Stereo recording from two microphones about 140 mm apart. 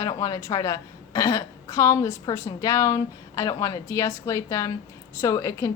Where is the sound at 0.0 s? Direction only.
25° left (ahead or behind).